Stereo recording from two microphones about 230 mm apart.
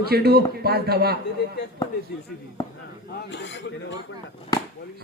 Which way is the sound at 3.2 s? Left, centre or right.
Left.